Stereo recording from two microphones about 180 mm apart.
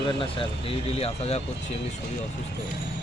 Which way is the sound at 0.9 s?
35° left (ahead or behind).